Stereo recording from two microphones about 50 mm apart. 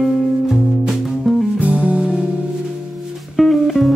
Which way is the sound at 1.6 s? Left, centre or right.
Right.